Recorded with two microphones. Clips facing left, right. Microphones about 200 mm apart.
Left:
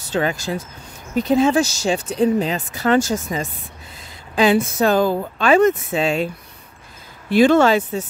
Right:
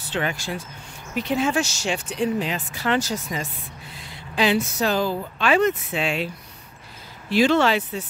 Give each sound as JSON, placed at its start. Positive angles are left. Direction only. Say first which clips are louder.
{"t": 0.0, "sound": "speech", "louder": "left 5 dB", "side_deg": 40}